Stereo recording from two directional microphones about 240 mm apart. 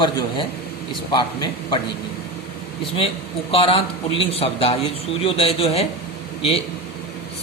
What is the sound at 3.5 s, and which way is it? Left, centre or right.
A man's voice, left.